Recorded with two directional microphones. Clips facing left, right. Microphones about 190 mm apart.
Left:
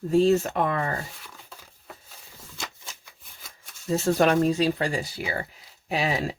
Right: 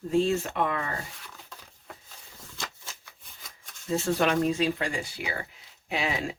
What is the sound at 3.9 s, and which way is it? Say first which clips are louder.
Speech: left 4 dB; 40° left (ahead or behind).